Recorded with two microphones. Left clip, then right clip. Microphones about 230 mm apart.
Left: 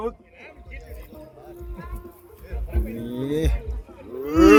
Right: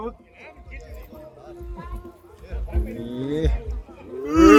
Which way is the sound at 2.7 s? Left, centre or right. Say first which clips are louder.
Even; centre.